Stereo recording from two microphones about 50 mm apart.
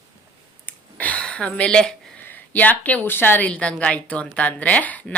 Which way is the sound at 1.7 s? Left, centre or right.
Centre.